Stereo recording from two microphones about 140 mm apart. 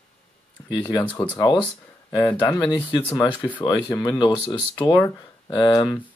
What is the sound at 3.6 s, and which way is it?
Speech, 30° left (ahead or behind).